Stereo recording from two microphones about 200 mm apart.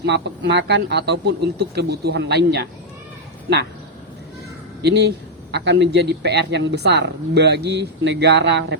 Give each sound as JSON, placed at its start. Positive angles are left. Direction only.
{"t": 0.0, "sound": "a man's voice", "side_deg": -60}
{"t": 4.8, "sound": "a man's voice", "side_deg": -55}